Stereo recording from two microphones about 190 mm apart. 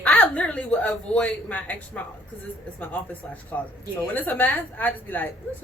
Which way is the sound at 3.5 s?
10° left (ahead or behind).